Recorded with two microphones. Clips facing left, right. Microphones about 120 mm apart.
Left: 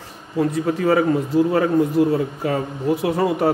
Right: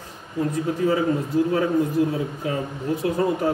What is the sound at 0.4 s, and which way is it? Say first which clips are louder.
Speech: left 3 dB; 85° left.